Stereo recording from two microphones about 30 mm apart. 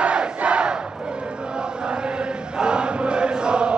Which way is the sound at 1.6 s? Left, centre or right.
Right.